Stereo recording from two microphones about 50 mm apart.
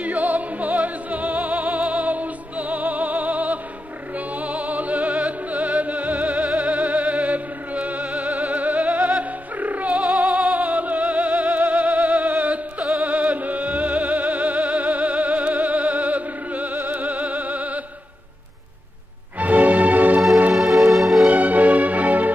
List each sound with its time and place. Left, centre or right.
0.0 s music: right
19.3 s music: right
20.5 s music: centre
21.3 s music: right